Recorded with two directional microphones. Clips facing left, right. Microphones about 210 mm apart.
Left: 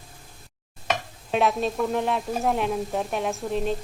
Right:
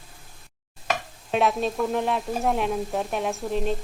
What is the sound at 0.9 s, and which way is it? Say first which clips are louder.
Speech: even; centre (ahead or behind).